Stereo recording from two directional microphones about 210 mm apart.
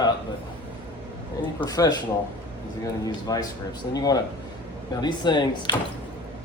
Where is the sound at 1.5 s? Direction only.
15° left (ahead or behind).